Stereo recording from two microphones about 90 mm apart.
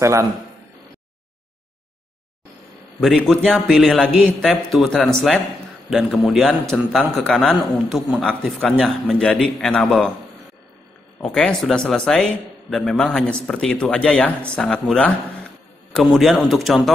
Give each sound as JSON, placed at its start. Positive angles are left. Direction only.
{"t": 0.0, "sound": "a man's voice", "side_deg": -35}
{"t": 3.3, "sound": "a man's voice", "side_deg": 5}
{"t": 8.2, "sound": "a man's voice", "side_deg": 10}
{"t": 11.2, "sound": "a man's voice", "side_deg": 10}